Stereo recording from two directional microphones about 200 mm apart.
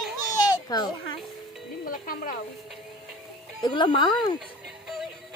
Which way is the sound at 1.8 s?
45° left (ahead or behind).